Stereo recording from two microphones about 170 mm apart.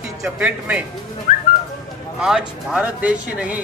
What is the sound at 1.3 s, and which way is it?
Whistling, 45° left (ahead or behind).